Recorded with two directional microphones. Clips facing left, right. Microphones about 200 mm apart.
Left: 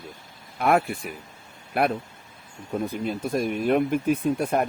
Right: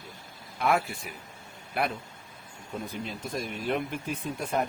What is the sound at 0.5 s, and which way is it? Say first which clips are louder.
Speech: left 5 dB; 55° left (ahead or behind).